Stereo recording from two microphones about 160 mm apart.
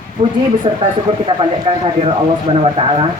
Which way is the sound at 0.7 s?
30° right (ahead or behind).